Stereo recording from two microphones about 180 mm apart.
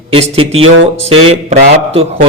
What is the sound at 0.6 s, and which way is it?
Music, 90° right.